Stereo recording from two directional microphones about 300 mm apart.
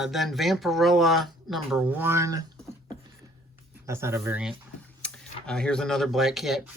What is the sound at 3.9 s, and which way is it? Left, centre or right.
Speech, centre.